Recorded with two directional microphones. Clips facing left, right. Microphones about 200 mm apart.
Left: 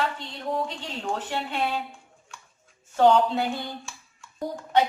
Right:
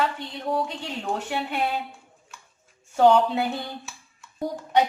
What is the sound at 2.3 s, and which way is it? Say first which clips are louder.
Chopping: left 1 dB; 5° right (ahead or behind).